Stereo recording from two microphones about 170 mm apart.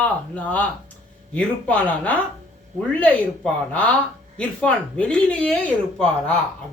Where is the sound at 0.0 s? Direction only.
10° left (ahead or behind).